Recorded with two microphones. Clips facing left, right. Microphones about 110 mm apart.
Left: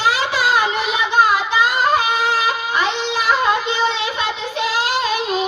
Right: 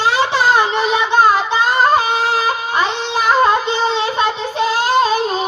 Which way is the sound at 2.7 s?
35° right (ahead or behind).